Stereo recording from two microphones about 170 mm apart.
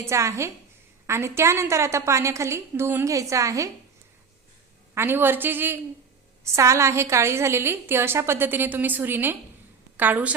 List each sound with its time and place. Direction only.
0.0 s a woman's voice: 15° right (ahead or behind)
4.9 s a woman's voice: 15° right (ahead or behind)